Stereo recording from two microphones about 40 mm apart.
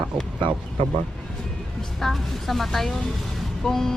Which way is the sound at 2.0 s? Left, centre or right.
Centre.